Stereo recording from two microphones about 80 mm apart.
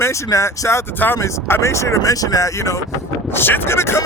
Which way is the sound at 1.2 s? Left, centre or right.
Left.